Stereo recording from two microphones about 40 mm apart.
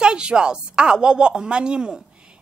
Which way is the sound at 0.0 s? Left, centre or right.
Right.